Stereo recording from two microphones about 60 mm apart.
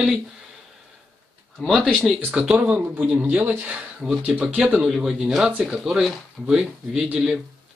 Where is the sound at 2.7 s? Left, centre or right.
Right.